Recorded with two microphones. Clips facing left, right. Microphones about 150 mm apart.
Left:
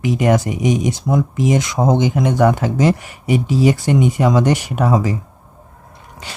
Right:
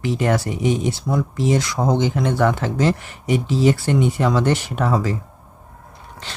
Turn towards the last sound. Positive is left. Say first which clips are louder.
# left 2 dB
turn(degrees=10)  # may be behind; listen again after turning